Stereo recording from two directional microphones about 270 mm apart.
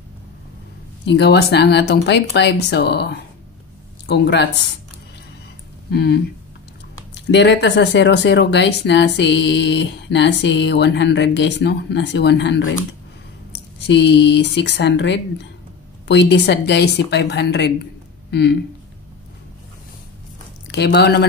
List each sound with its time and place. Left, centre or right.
1.0 s speech: left
5.9 s speech: left
7.2 s speech: left
13.7 s speech: left
20.6 s speech: left